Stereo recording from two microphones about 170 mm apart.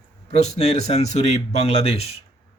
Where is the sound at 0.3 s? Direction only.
40° left (ahead or behind).